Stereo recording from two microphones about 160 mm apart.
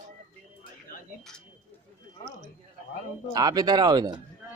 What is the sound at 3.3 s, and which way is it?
Speech, 25° right (ahead or behind).